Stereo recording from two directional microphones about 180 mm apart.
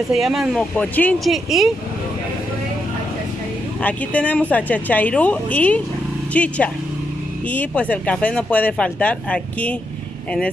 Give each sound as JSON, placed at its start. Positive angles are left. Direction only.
{"t": 0.1, "sound": "speech", "side_deg": 0}
{"t": 3.8, "sound": "speech", "side_deg": 10}